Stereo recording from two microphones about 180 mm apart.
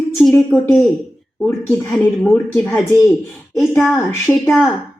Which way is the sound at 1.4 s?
15° left (ahead or behind).